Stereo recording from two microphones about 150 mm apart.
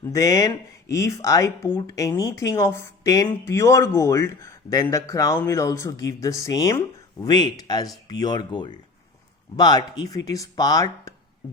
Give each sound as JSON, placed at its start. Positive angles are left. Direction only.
{"t": 0.0, "sound": "speech", "side_deg": 20}